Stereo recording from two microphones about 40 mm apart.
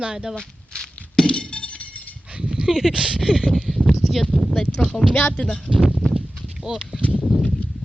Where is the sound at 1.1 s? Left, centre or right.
Left.